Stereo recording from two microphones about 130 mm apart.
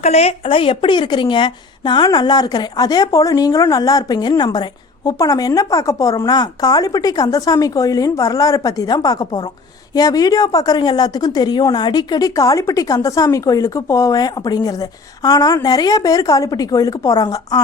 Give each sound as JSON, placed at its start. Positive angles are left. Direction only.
{"t": 0.0, "sound": "a woman's voice", "side_deg": 55}